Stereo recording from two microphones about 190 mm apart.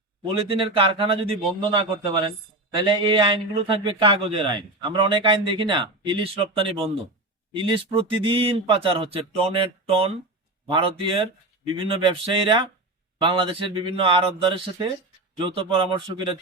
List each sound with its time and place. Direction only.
0.3 s a man's voice: 30° right (ahead or behind)